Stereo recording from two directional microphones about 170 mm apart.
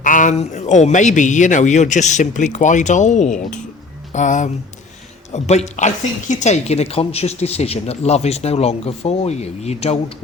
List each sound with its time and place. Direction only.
0.0 s a man's voice: 50° left (ahead or behind)